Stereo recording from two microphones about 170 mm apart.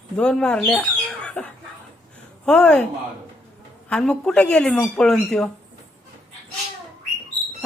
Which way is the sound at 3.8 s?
5° left (ahead or behind).